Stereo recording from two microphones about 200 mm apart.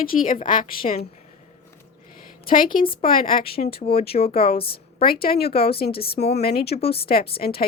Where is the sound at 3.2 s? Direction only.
45° left (ahead or behind).